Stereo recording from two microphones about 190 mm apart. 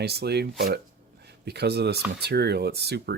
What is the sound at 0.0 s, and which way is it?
Speech, 60° right (ahead or behind).